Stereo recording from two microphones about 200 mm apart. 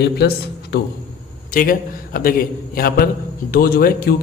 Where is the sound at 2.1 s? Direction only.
45° left (ahead or behind).